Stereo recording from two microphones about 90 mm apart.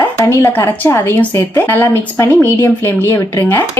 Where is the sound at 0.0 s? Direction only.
25° left (ahead or behind).